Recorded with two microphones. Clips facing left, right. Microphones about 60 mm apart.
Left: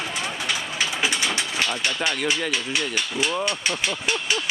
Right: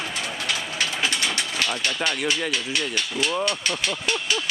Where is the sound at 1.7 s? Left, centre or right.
Centre.